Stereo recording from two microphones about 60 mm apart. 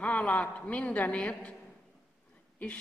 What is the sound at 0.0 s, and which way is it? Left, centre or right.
A man's voice, left.